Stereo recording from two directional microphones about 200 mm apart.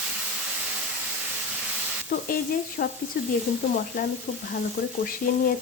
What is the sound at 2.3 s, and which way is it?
Speech, 45° left (ahead or behind).